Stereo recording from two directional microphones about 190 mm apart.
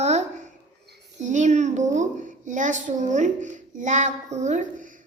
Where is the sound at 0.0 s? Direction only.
35° right (ahead or behind).